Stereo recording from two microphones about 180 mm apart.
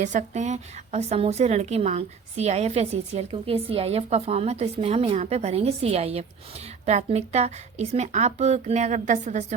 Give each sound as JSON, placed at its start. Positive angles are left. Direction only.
{"t": 0.0, "sound": "a woman's voice", "side_deg": -45}